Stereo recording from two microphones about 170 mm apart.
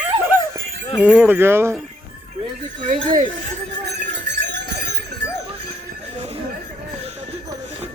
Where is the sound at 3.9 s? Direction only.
90° right.